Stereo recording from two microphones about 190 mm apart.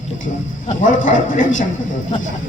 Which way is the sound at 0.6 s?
45° left (ahead or behind).